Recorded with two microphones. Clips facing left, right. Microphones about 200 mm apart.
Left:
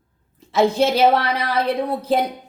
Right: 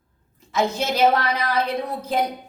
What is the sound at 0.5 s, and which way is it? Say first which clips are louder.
A woman's voice: left 6 dB; 30° left (ahead or behind).